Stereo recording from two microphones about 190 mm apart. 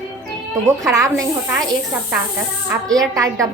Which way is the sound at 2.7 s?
20° right (ahead or behind).